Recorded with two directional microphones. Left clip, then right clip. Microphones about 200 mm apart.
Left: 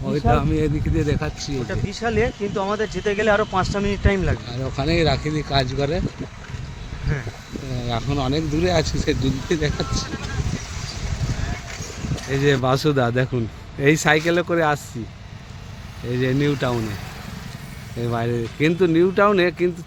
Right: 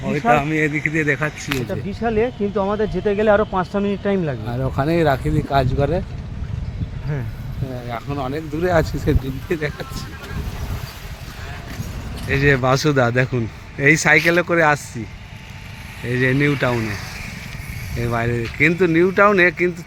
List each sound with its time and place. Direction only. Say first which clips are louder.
0.1 s speech: right 4 dB; 15° left (ahead or behind)
1.9 s speech: right 2 dB; 40° right (ahead or behind)
4.6 s speech: right 3 dB; 15° right (ahead or behind)
7.9 s speech: left 2 dB; 15° right (ahead or behind)
12.3 s a man's voice: right 3 dB; centre (ahead or behind)
16.2 s speech: right 4 dB; 10° right (ahead or behind)
18.0 s a man's voice: right 2 dB; centre (ahead or behind)